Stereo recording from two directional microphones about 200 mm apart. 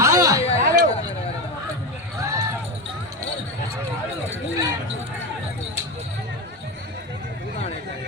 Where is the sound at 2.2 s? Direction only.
15° right (ahead or behind).